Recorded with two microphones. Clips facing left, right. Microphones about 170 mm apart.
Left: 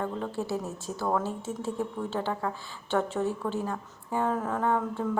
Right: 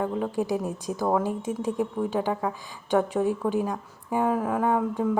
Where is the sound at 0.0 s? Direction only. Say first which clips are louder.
Right 5 dB; 15° right (ahead or behind).